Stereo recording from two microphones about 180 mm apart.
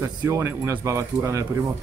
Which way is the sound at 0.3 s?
15° right (ahead or behind).